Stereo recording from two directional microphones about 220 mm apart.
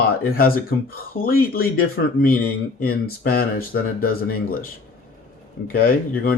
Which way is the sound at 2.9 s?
40° left (ahead or behind).